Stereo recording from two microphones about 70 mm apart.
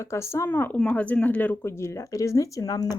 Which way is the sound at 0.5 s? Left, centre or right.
Left.